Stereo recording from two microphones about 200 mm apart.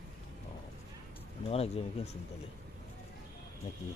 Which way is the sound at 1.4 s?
30° left (ahead or behind).